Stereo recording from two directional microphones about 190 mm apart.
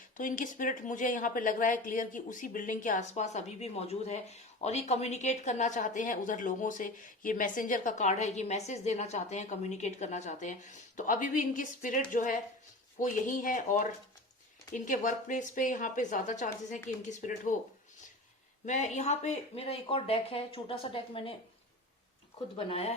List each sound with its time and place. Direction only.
0.2 s speech: 45° left (ahead or behind)
14.8 s speech: 40° left (ahead or behind)
18.6 s speech: 40° left (ahead or behind)
22.5 s speech: 30° left (ahead or behind)